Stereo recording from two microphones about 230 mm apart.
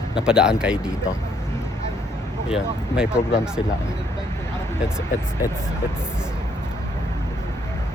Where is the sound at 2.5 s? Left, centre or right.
Centre.